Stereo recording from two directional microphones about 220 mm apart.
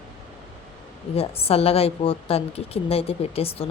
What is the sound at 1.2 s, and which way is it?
A woman's voice, 25° left (ahead or behind).